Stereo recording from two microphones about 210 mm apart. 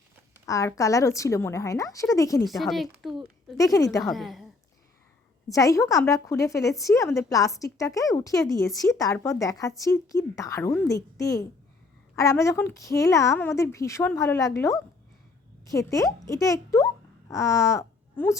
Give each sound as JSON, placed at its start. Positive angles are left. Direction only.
{"t": 0.4, "sound": "speech", "side_deg": 15}
{"t": 2.5, "sound": "a woman's voice", "side_deg": 0}
{"t": 3.6, "sound": "speech", "side_deg": 15}
{"t": 4.0, "sound": "a woman's voice", "side_deg": 0}
{"t": 5.5, "sound": "a child's voice", "side_deg": 15}